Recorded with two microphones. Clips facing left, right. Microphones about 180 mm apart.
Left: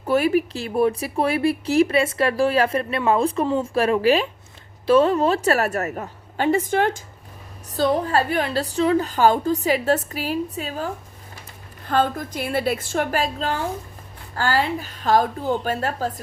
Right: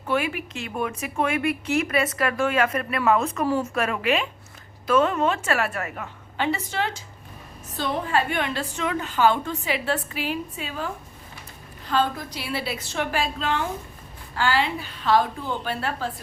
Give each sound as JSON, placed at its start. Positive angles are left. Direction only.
{"t": 0.1, "sound": "speech", "side_deg": 40}
{"t": 7.8, "sound": "a woman's voice", "side_deg": 40}